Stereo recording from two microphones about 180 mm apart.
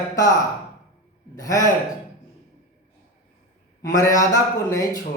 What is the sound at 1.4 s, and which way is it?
Speech, 20° left (ahead or behind).